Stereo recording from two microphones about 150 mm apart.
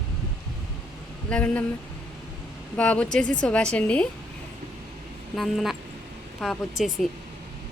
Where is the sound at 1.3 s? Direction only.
10° left (ahead or behind).